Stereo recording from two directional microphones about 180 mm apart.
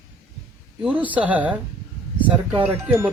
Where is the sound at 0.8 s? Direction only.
10° right (ahead or behind).